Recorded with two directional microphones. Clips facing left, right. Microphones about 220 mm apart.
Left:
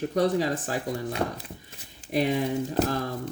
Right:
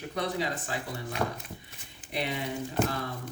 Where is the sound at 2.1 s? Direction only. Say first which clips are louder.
Left 8 dB; 45° left (ahead or behind).